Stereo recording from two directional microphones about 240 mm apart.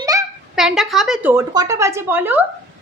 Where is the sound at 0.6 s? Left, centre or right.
Centre.